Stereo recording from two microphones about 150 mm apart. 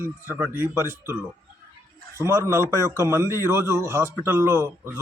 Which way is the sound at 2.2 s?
20° right (ahead or behind).